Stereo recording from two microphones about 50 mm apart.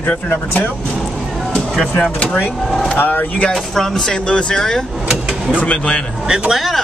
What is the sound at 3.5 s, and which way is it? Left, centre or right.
Speech, centre.